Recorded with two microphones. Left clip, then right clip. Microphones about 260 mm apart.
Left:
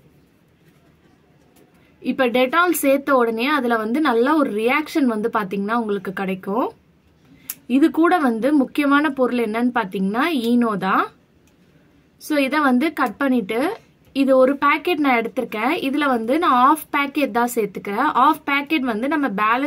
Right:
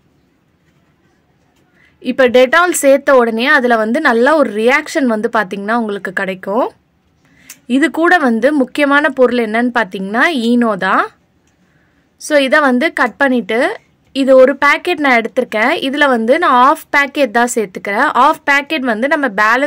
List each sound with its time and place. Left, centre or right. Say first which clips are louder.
2.0 s speech: right 9 dB; right
12.2 s speech: right 9 dB; right